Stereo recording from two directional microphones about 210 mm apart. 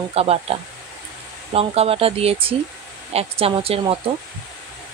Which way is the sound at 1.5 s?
30° right (ahead or behind).